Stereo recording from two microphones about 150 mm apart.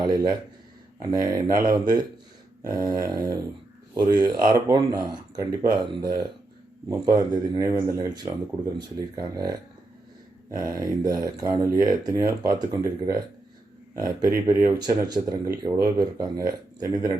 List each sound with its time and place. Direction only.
0.0 s speech: 25° right (ahead or behind)
10.7 s speech: 20° right (ahead or behind)